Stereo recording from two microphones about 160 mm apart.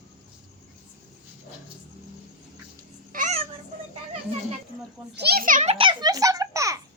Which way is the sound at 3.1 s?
55° right (ahead or behind).